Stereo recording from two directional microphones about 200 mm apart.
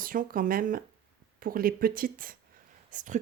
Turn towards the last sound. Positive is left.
turn(degrees=-40)  # may be behind; listen again after turning